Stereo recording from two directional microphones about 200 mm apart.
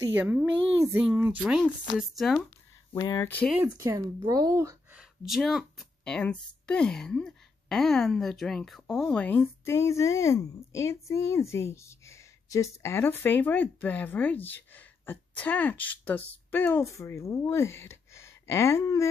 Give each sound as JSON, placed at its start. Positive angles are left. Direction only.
{"t": 0.0, "sound": "speech", "side_deg": -10}
{"t": 2.9, "sound": "speech", "side_deg": 15}
{"t": 3.7, "sound": "speech", "side_deg": -15}
{"t": 4.9, "sound": "speech", "side_deg": 0}